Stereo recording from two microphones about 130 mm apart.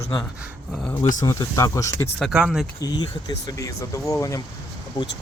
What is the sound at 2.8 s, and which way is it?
Speech, 30° left (ahead or behind).